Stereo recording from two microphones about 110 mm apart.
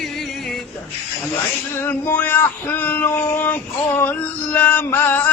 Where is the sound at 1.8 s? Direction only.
20° left (ahead or behind).